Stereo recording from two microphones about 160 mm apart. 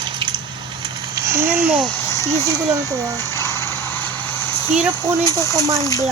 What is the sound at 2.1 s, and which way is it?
Speech, 20° left (ahead or behind).